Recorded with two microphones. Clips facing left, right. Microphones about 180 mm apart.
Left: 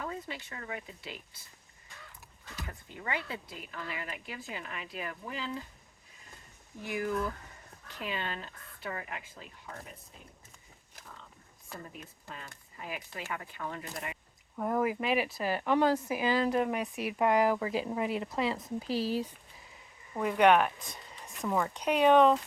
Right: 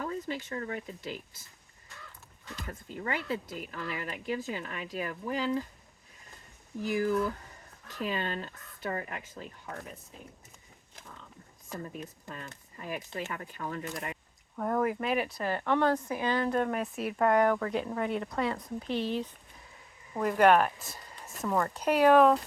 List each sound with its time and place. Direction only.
0.0 s speech: 40° right (ahead or behind)
2.6 s speech: 45° right (ahead or behind)
7.9 s speech: 40° right (ahead or behind)
11.9 s speech: 45° right (ahead or behind)
14.5 s speech: 10° left (ahead or behind)